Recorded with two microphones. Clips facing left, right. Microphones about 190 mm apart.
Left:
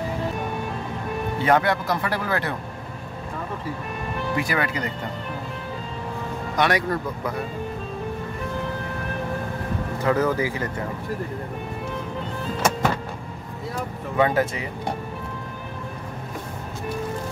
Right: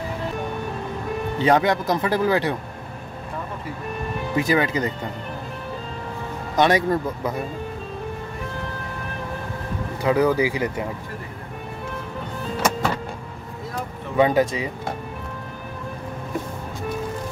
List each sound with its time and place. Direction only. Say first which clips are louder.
1.4 s speech: right 2 dB; 20° right (ahead or behind)
4.4 s speech: right 6 dB; 20° right (ahead or behind)
6.5 s speech: right 4 dB; 25° right (ahead or behind)
10.0 s speech: right 3 dB; 15° right (ahead or behind)
14.1 s speech: right 3 dB; 15° right (ahead or behind)